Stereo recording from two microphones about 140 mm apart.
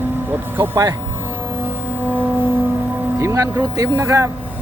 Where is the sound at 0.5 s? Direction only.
15° right (ahead or behind).